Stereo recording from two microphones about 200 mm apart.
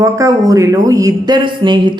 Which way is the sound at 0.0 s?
15° right (ahead or behind).